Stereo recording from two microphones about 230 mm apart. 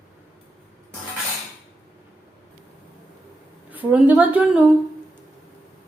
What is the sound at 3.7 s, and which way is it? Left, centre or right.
Speech, centre.